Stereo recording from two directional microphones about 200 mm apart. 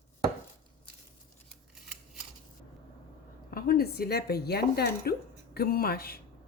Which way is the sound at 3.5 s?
50° left (ahead or behind).